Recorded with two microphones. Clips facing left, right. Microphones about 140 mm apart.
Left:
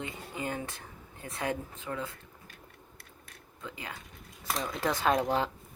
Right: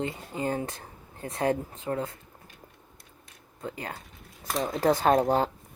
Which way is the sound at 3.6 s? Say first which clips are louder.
Right 6 dB; 40° right (ahead or behind).